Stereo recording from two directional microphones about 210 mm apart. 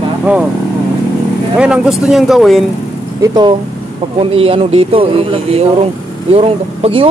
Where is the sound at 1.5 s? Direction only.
5° right (ahead or behind).